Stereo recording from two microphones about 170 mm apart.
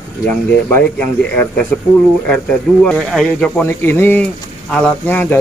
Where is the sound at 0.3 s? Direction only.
10° left (ahead or behind).